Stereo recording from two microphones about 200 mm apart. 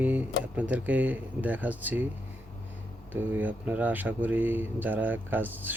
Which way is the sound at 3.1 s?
10° right (ahead or behind).